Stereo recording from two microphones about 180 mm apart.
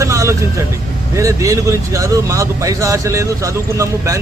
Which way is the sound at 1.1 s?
15° right (ahead or behind).